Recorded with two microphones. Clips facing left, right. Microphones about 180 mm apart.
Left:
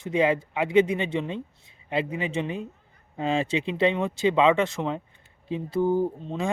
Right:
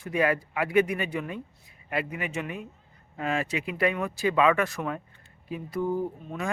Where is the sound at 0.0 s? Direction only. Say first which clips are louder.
Left 3 dB; 20° left (ahead or behind).